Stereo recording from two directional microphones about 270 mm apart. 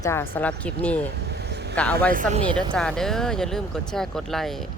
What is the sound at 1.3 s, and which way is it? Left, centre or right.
Vehicle, right.